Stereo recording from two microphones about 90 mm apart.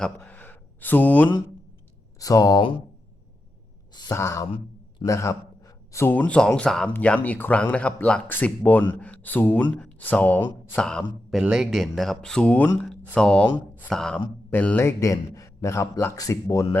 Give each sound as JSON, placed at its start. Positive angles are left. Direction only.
{"t": 0.2, "sound": "a sound", "side_deg": 20}
{"t": 2.1, "sound": "speech", "side_deg": 40}
{"t": 4.1, "sound": "a man's voice", "side_deg": 30}
{"t": 5.0, "sound": "gasp", "side_deg": 35}
{"t": 6.1, "sound": "speech", "side_deg": 15}
{"t": 10.8, "sound": "speech", "side_deg": 10}
{"t": 11.4, "sound": "speech", "side_deg": -5}
{"t": 14.5, "sound": "speech", "side_deg": 20}
{"t": 14.8, "sound": "a man's voice", "side_deg": 35}